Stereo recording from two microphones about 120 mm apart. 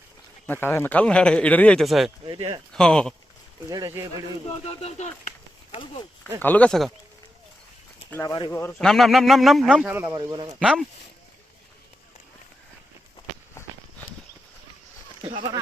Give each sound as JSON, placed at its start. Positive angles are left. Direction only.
{"t": 0.4, "sound": "speech", "side_deg": 15}
{"t": 2.2, "sound": "speech", "side_deg": -45}
{"t": 2.7, "sound": "a man's voice", "side_deg": 5}
{"t": 3.7, "sound": "speech", "side_deg": -30}
{"t": 4.6, "sound": "speech", "side_deg": 60}
{"t": 6.4, "sound": "speech", "side_deg": 15}
{"t": 8.2, "sound": "speech", "side_deg": 30}
{"t": 8.8, "sound": "a man's voice", "side_deg": 5}
{"t": 9.8, "sound": "speech", "side_deg": -15}
{"t": 10.6, "sound": "a man's voice", "side_deg": -5}